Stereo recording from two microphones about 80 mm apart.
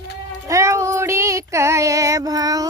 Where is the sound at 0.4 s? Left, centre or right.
Right.